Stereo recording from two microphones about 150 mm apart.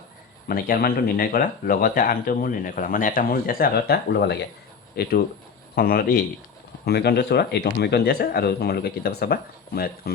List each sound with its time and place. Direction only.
0.4 s a man's voice: 80° left
6.8 s speech: 90° left